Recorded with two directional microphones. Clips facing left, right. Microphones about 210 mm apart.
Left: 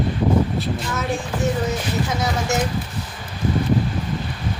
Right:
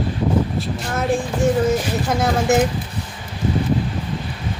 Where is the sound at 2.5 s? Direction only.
55° right (ahead or behind).